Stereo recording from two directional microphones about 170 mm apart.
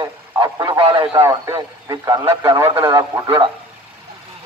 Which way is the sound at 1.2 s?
20° right (ahead or behind).